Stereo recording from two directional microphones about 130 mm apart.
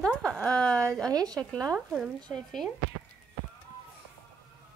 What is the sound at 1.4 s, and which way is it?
A woman's voice, 5° left (ahead or behind).